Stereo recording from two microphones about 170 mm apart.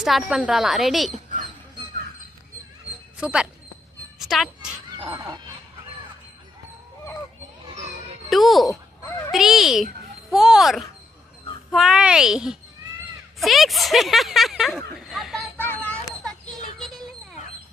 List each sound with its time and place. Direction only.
0.0 s speech: centre (ahead or behind)
3.2 s speech: 5° right (ahead or behind)
5.0 s cat: 15° right (ahead or behind)
8.3 s speech: centre (ahead or behind)
15.5 s children playing: 10° left (ahead or behind)